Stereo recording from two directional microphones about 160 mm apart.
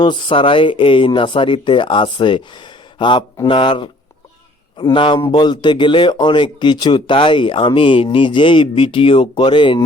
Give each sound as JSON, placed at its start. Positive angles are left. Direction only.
{"t": 0.0, "sound": "speech", "side_deg": 30}